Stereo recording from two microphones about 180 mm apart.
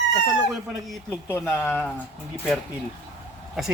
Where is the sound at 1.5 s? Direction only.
10° left (ahead or behind).